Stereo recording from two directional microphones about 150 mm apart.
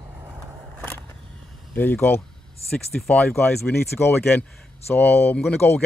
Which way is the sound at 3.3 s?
15° left (ahead or behind).